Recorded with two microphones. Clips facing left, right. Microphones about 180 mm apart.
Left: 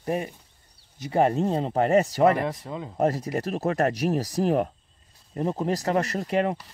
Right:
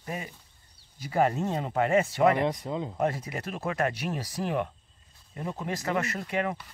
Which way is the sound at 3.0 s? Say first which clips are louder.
Left 9 dB; 40° left (ahead or behind).